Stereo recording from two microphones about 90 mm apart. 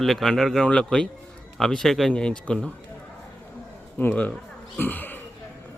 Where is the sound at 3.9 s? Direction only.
15° left (ahead or behind).